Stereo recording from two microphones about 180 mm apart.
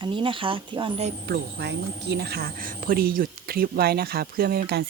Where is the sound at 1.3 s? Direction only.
70° right (ahead or behind).